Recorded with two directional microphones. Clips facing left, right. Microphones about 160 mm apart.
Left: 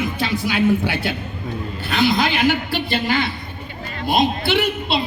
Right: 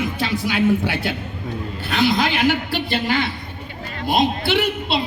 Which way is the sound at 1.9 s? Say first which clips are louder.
Even; 10° left (ahead or behind).